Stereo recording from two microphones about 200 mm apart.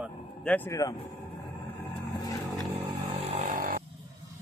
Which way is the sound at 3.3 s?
40° right (ahead or behind).